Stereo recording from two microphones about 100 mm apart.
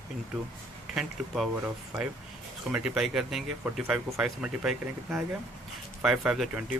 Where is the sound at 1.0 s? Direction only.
Centre (ahead or behind).